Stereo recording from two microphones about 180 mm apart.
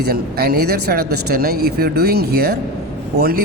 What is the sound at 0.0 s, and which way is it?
Speech, 60° right (ahead or behind).